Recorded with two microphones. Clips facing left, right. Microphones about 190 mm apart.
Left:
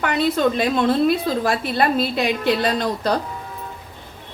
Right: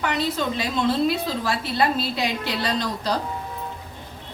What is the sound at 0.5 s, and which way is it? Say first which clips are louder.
A woman's voice: left 4 dB; 55° left (ahead or behind).